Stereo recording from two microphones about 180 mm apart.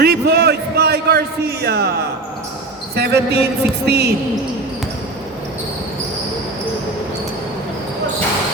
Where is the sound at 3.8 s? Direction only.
65° right (ahead or behind).